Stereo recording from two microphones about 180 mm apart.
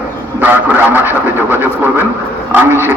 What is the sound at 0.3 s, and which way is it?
Speech, 10° right (ahead or behind).